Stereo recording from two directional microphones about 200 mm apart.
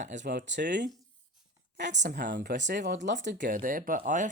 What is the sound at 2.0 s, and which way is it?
Speech, 55° right (ahead or behind).